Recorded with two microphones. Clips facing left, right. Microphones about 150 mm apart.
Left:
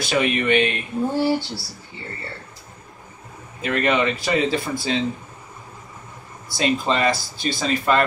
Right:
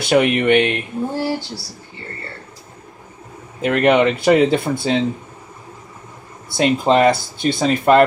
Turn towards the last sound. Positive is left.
turn(degrees=-60)  # may be behind; listen again after turning